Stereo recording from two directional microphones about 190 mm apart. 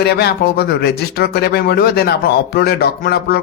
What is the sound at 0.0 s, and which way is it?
Speech, 60° left (ahead or behind).